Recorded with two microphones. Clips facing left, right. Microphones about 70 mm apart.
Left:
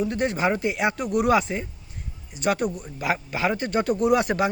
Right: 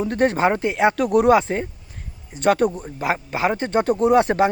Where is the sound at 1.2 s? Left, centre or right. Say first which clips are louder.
Right 3 dB; right.